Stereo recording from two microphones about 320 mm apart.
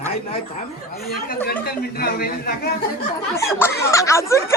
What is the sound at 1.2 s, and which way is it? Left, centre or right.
Speech, left.